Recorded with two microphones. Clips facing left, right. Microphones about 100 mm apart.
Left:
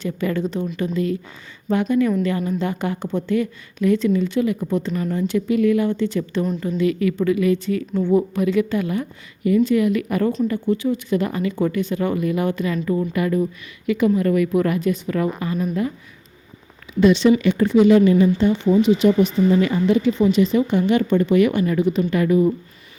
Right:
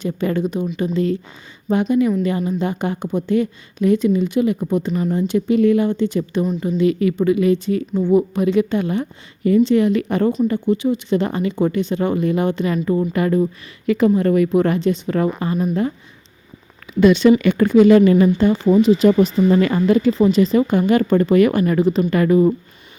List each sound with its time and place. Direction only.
0.0 s speech: 20° right (ahead or behind)
0.8 s a woman's voice: 25° right (ahead or behind)
7.9 s speech: 10° right (ahead or behind)
8.4 s a woman's voice: 20° right (ahead or behind)
17.0 s speech: 60° right (ahead or behind)
18.3 s speech: 45° right (ahead or behind)
20.0 s a woman's voice: 35° right (ahead or behind)